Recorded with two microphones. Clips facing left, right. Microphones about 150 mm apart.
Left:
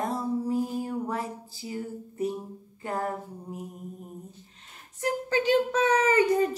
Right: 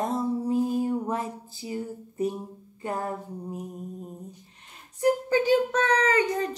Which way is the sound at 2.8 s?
20° right (ahead or behind).